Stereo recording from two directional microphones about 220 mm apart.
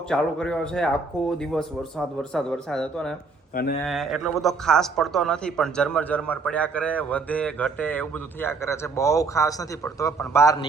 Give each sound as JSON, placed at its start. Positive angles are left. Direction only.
{"t": 0.1, "sound": "a man's voice", "side_deg": 5}
{"t": 3.5, "sound": "speech", "side_deg": 45}
{"t": 3.8, "sound": "a man's voice", "side_deg": 0}